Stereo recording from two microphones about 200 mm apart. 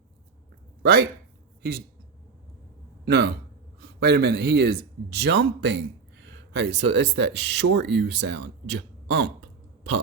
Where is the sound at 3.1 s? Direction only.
55° right (ahead or behind).